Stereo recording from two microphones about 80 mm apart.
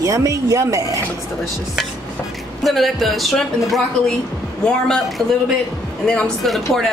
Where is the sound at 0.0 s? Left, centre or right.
Right.